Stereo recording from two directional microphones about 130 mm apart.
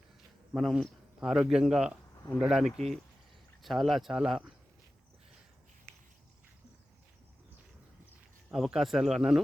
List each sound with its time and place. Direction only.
0.5 s speech: centre (ahead or behind)
5.9 s a sound: 20° right (ahead or behind)
8.5 s speech: centre (ahead or behind)